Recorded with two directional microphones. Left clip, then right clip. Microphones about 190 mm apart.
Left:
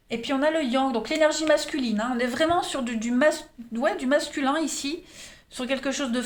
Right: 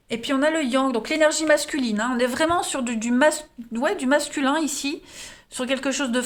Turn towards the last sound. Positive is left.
turn(degrees=-40)  # may be behind; listen again after turning